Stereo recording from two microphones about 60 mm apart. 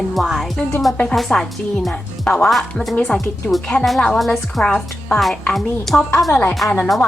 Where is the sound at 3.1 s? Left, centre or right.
Left.